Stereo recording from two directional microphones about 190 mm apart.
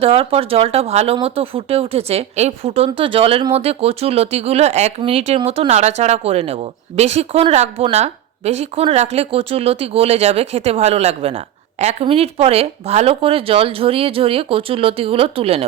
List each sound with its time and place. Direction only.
0.0 s speech: 30° right (ahead or behind)